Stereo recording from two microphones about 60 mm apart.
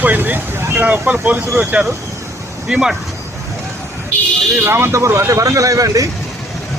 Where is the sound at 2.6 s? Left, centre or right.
Centre.